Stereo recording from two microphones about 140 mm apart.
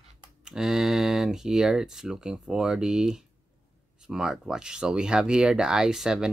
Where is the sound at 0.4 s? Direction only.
5° right (ahead or behind).